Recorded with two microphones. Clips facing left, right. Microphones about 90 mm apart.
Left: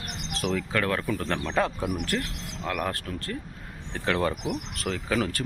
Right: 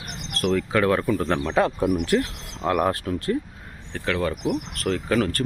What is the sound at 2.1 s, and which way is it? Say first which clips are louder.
Speech: right 8 dB; 25° right (ahead or behind).